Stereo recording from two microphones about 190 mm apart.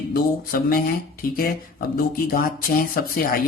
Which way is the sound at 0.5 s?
50° left (ahead or behind).